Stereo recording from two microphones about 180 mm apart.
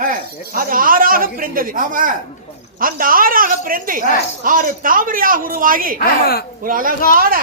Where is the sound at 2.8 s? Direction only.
50° right (ahead or behind).